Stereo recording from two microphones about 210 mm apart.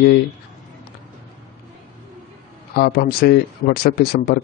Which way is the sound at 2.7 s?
45° left (ahead or behind).